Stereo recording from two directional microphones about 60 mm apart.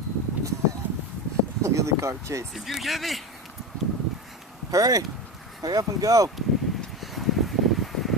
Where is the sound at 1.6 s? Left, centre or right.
Right.